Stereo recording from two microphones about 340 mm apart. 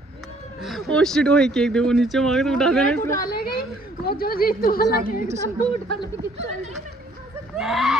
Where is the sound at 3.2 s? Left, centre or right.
Left.